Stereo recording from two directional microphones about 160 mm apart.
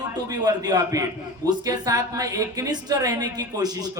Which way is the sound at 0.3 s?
25° right (ahead or behind).